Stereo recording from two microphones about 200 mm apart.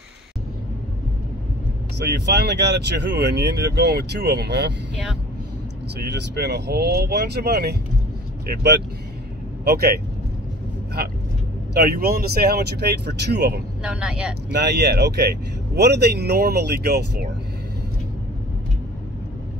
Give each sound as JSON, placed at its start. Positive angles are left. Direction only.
{"t": 2.0, "sound": "speech", "side_deg": -55}
{"t": 5.9, "sound": "speech", "side_deg": -55}
{"t": 9.7, "sound": "speech", "side_deg": -50}
{"t": 11.7, "sound": "speech", "side_deg": -50}
{"t": 13.8, "sound": "speech", "side_deg": -5}
{"t": 14.5, "sound": "speech", "side_deg": -55}